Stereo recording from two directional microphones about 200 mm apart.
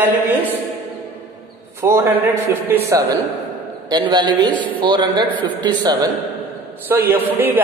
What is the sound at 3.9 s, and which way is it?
A man's voice, 20° right (ahead or behind).